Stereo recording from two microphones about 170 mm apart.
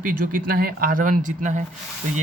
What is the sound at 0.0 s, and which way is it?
Speech, 55° right (ahead or behind).